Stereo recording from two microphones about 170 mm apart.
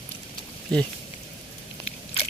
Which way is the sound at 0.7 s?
5° left (ahead or behind).